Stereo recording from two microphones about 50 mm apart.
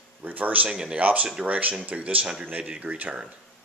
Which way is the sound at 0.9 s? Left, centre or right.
Right.